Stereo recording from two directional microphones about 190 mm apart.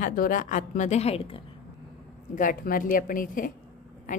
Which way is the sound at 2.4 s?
45° left (ahead or behind).